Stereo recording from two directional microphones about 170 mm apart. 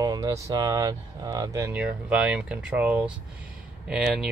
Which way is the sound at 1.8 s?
5° right (ahead or behind).